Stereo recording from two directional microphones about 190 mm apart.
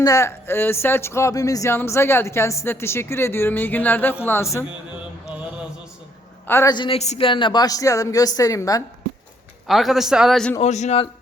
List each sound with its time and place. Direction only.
0.0 s speech: 15° left (ahead or behind)
6.5 s a woman's voice: 15° left (ahead or behind)
9.6 s a man's voice: centre (ahead or behind)
10.6 s a man's voice: 35° left (ahead or behind)